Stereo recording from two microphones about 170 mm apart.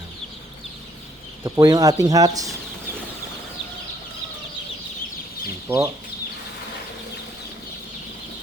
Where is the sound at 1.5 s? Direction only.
20° right (ahead or behind).